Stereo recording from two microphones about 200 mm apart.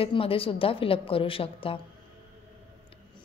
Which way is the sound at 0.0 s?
30° left (ahead or behind).